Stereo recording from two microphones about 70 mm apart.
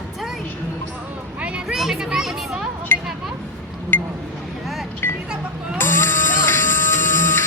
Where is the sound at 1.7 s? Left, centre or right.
Centre.